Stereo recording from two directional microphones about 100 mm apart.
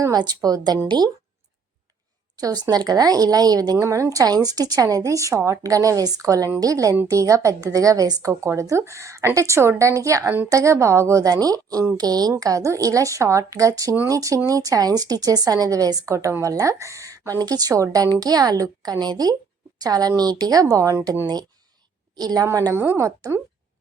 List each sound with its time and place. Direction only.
0.0 s speech: 40° right (ahead or behind)
2.4 s a woman's voice: 40° right (ahead or behind)